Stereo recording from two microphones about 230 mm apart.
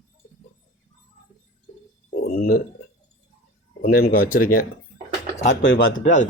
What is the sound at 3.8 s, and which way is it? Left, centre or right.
Speech, left.